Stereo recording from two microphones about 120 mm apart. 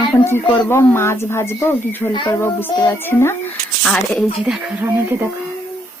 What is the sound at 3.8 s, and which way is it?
Speech, 5° left (ahead or behind).